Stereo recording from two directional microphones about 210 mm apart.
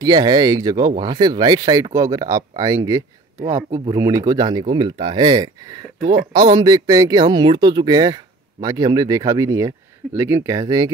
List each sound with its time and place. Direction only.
0.0 s speech: 20° right (ahead or behind)